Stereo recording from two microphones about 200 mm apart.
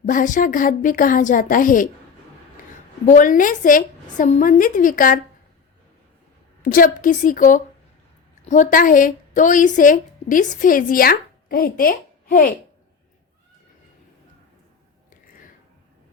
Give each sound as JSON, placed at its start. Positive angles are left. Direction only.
{"t": 0.0, "sound": "speech", "side_deg": 40}
{"t": 3.1, "sound": "speech", "side_deg": 40}
{"t": 6.6, "sound": "a woman's voice", "side_deg": 45}